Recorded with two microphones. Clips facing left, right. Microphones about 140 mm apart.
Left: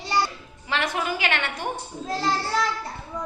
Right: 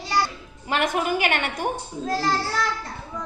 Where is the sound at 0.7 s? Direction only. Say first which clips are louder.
Right 3 dB; 50° right (ahead or behind).